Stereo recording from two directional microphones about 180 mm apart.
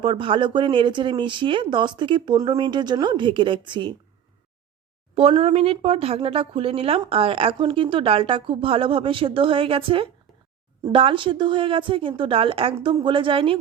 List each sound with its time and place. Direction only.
0.0 s speech: 30° right (ahead or behind)
5.1 s speech: 35° right (ahead or behind)